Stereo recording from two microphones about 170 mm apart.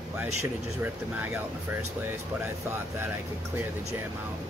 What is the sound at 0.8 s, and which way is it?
Speech, 10° right (ahead or behind).